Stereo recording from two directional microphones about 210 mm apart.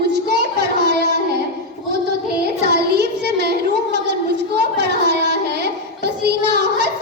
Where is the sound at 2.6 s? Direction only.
50° right (ahead or behind).